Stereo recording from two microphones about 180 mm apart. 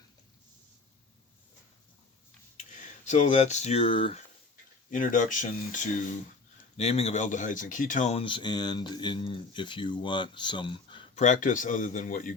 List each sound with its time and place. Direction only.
2.8 s speech: 40° left (ahead or behind)
4.9 s speech: 50° left (ahead or behind); by 11.2 s 25° left (ahead or behind)
11.2 s speech: 45° left (ahead or behind)